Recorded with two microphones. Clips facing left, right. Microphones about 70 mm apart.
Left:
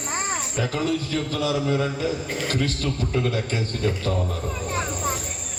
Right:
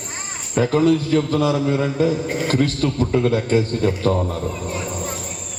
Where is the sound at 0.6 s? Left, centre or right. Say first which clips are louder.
Right 10 dB; right.